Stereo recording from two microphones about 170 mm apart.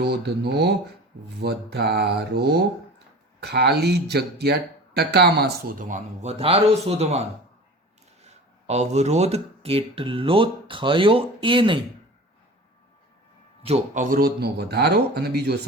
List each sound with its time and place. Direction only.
0.0 s speech: 75° right (ahead or behind); by 11.8 s 30° right (ahead or behind)
13.7 s speech: 40° right (ahead or behind); by 15.5 s 70° right (ahead or behind)